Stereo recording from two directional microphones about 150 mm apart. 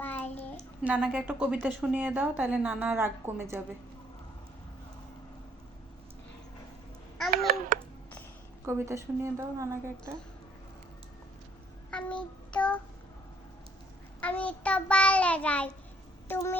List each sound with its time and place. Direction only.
0.0 s a sound: 10° left (ahead or behind)
0.8 s a woman's voice: 5° right (ahead or behind)
7.3 s babbling: 70° right (ahead or behind)
8.6 s a woman's voice: 15° right (ahead or behind)
11.9 s child singing: 5° left (ahead or behind)
14.2 s child singing: 10° left (ahead or behind)
16.3 s speech: 15° left (ahead or behind)